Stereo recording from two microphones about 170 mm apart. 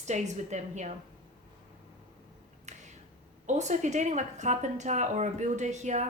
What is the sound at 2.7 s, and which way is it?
Finger snapping, 45° right (ahead or behind).